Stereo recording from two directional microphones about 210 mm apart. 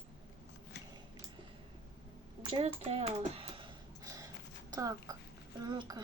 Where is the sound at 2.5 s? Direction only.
30° right (ahead or behind).